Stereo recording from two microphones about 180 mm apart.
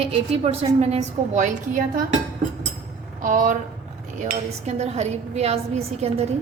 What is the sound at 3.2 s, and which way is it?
Speech, 50° right (ahead or behind).